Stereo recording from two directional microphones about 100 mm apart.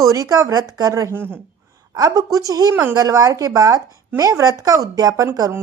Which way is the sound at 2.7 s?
20° right (ahead or behind).